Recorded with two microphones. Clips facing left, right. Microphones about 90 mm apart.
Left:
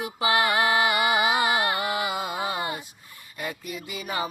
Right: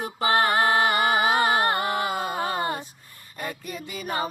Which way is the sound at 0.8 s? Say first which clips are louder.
Right 1 dB; 40° right (ahead or behind).